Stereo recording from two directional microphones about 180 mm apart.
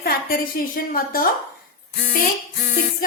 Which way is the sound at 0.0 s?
55° left (ahead or behind).